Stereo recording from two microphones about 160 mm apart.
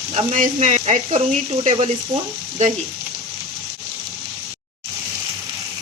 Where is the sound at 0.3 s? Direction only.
55° right (ahead or behind).